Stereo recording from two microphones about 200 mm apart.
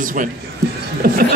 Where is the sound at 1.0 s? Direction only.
45° right (ahead or behind).